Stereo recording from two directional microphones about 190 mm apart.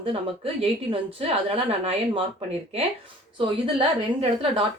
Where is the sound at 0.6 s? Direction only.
30° right (ahead or behind).